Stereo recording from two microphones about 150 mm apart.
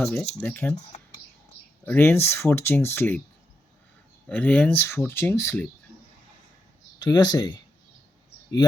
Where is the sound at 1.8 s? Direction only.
15° left (ahead or behind).